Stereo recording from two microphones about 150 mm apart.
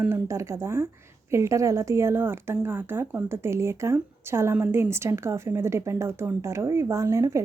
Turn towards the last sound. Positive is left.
turn(degrees=-20)  # may be behind; listen again after turning